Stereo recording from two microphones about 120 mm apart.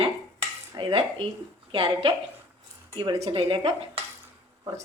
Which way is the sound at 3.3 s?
45° right (ahead or behind).